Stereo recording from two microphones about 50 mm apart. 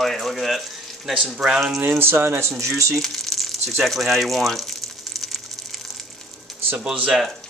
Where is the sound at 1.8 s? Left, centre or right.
Right.